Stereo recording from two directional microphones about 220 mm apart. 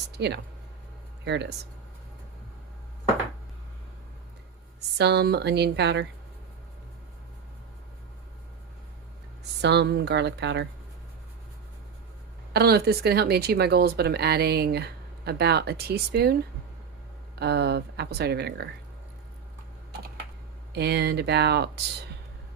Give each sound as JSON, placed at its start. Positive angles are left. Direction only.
{"t": 0.2, "sound": "speech", "side_deg": -50}
{"t": 4.9, "sound": "speech", "side_deg": -50}
{"t": 9.4, "sound": "speech", "side_deg": -50}
{"t": 12.5, "sound": "speech", "side_deg": -45}
{"t": 17.4, "sound": "speech", "side_deg": -45}
{"t": 20.7, "sound": "speech", "side_deg": -50}